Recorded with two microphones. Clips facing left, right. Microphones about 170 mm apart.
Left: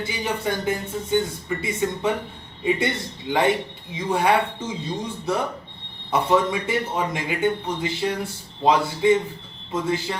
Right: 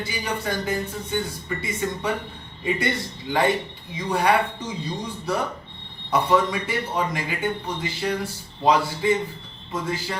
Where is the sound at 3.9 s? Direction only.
25° left (ahead or behind).